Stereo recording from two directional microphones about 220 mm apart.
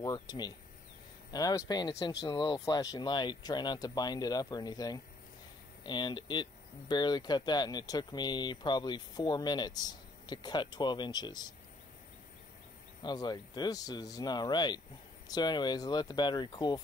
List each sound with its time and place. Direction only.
0.0 s speech: 20° left (ahead or behind)
13.0 s speech: 20° left (ahead or behind)